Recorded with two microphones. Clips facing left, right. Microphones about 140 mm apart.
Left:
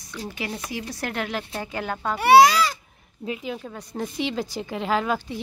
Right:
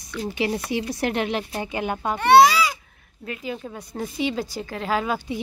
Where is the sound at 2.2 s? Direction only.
Centre (ahead or behind).